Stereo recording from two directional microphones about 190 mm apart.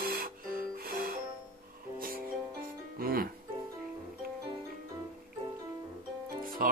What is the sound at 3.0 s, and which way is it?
Speech, 50° right (ahead or behind).